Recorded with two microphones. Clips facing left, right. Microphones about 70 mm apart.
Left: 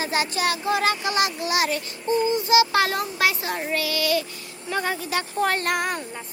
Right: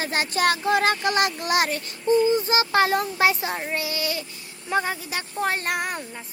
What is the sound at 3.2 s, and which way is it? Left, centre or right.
Child singing, right.